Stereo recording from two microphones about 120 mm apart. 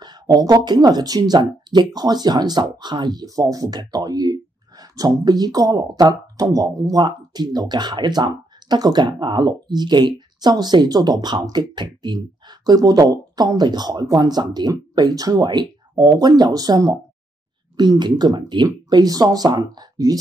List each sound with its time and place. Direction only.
0.0 s speech: 35° right (ahead or behind)